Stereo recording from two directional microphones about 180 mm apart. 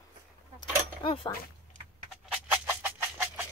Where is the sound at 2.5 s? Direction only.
15° right (ahead or behind).